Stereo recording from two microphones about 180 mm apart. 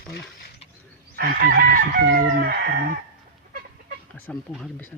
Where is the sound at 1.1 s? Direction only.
60° right (ahead or behind).